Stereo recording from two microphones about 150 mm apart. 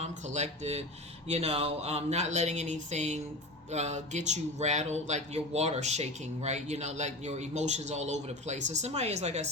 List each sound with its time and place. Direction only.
0.0 s speech: 50° right (ahead or behind)